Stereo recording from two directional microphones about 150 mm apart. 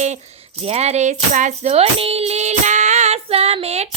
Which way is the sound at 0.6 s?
45° right (ahead or behind).